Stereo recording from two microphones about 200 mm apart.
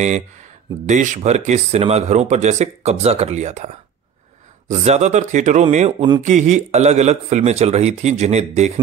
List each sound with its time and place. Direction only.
0.8 s speech: 40° right (ahead or behind)